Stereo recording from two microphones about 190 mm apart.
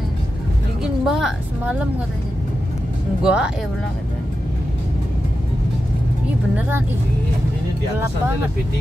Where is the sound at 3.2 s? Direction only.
5° right (ahead or behind).